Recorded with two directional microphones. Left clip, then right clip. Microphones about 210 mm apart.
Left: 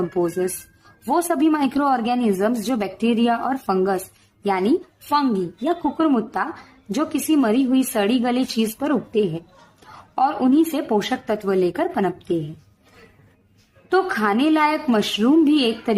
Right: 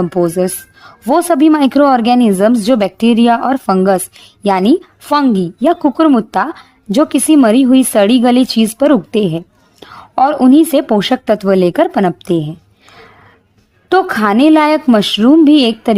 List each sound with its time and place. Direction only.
0.1 s a woman's voice: 45° right (ahead or behind)
13.9 s a woman's voice: 45° right (ahead or behind)